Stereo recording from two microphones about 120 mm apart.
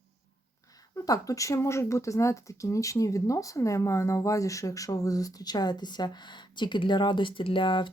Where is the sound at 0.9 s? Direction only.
30° left (ahead or behind).